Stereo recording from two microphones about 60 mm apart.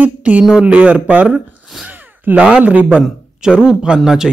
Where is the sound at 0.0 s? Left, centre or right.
Right.